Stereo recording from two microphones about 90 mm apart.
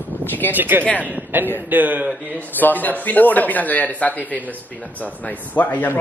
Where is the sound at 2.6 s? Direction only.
20° left (ahead or behind).